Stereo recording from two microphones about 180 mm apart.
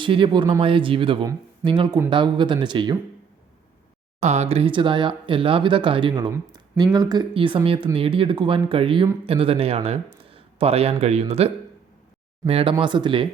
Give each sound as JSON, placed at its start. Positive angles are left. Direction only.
{"t": 0.0, "sound": "speech", "side_deg": -25}
{"t": 4.2, "sound": "speech", "side_deg": -35}